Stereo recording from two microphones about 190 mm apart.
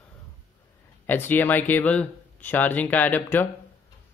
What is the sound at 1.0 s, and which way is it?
Speech, 10° left (ahead or behind).